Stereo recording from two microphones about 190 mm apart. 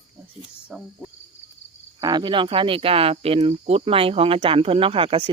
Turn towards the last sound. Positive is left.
turn(degrees=-30)  # may be behind; listen again after turning